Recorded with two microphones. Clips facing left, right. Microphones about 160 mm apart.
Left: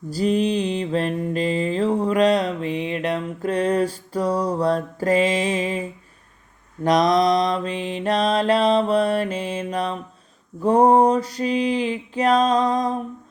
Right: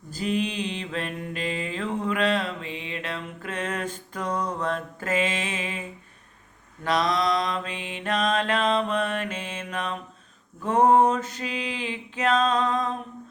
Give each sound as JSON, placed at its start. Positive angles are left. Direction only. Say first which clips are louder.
{"t": 0.1, "sound": "mantra", "louder": "left 7 dB", "side_deg": 35}
{"t": 6.8, "sound": "mantra", "louder": "left 7 dB", "side_deg": 40}